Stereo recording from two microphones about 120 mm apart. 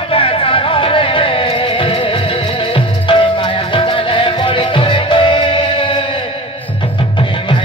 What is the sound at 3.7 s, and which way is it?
Music, 45° left (ahead or behind).